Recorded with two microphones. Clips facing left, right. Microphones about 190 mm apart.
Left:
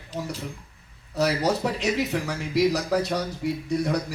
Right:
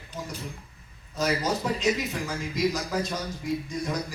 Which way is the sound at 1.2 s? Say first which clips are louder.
Left 4 dB; 70° left (ahead or behind).